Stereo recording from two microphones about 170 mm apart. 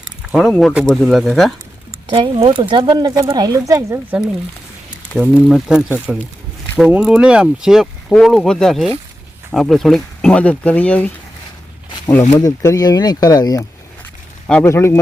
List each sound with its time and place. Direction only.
0.3 s speech: centre (ahead or behind)
2.0 s speech: 30° right (ahead or behind)
5.1 s speech: 5° right (ahead or behind)
12.4 s speech: 20° left (ahead or behind)
14.4 s speech: 10° left (ahead or behind)